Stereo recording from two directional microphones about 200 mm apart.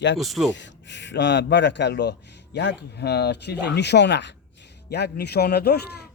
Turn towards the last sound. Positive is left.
turn(degrees=55)  # may be behind; listen again after turning